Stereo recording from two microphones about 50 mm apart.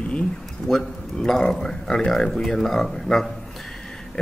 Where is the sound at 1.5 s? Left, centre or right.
Centre.